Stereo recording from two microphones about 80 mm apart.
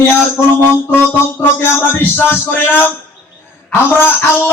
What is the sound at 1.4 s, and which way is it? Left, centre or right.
Speech, left.